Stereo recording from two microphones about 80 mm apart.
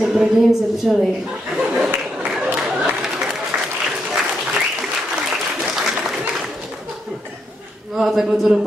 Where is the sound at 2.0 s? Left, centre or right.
Centre.